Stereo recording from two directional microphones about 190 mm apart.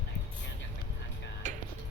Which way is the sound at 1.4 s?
40° right (ahead or behind).